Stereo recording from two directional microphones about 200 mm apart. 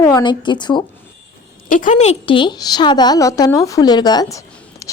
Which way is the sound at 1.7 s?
40° left (ahead or behind).